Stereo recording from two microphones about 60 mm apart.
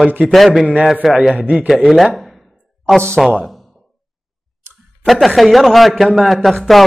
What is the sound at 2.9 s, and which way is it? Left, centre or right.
Speech, centre.